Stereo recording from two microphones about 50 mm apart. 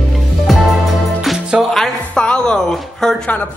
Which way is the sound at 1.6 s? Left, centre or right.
Centre.